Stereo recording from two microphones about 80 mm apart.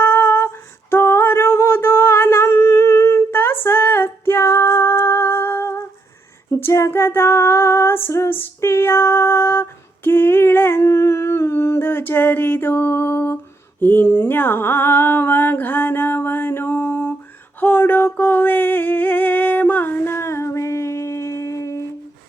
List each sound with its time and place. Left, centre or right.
0.0 s singing: left
6.5 s female singing: left
17.6 s a sound: left